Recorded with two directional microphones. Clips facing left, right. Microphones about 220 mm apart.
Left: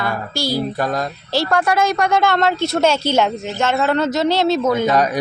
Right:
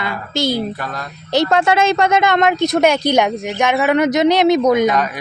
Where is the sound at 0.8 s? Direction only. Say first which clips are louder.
Left 7 dB; 40° left (ahead or behind).